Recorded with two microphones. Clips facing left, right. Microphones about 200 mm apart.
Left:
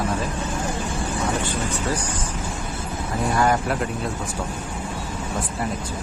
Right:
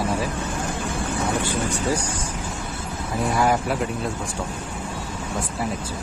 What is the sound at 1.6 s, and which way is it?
Speech, 10° right (ahead or behind).